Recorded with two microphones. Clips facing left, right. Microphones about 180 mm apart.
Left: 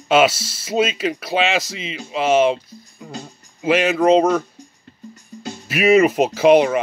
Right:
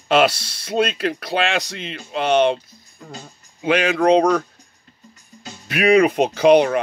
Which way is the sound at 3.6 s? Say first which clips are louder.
Left 1 dB; 5° left (ahead or behind).